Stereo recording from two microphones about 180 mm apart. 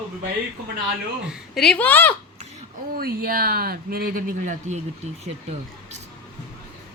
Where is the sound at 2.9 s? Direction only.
55° right (ahead or behind); by 6.0 s 35° right (ahead or behind).